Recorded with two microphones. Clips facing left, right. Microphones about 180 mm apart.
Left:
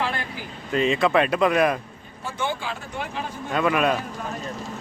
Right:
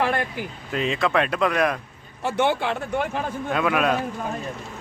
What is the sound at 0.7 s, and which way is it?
Speech, centre (ahead or behind).